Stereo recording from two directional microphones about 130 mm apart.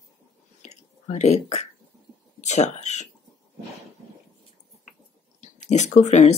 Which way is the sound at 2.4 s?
65° left (ahead or behind).